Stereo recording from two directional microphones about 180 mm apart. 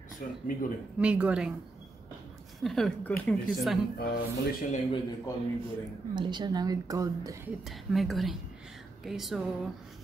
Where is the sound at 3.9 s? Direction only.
55° left (ahead or behind).